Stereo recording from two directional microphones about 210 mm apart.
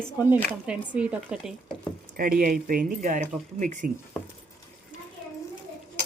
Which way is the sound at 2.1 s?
45° right (ahead or behind).